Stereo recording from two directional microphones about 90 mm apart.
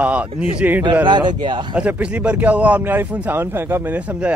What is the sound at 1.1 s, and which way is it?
Speech, 55° right (ahead or behind).